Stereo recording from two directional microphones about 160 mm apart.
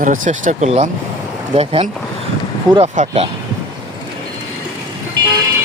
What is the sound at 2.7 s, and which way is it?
Speech, 25° right (ahead or behind).